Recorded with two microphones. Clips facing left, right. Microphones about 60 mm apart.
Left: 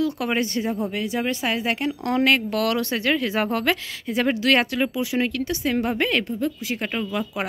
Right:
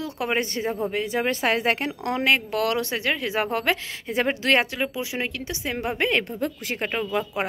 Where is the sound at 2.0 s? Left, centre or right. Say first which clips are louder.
Left 2 dB; centre.